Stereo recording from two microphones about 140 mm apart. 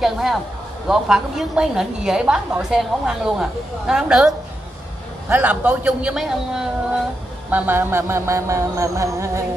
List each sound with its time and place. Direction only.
0.0 s a woman's voice: centre (ahead or behind)
5.3 s a man's voice: 10° right (ahead or behind)
7.5 s music: 15° right (ahead or behind)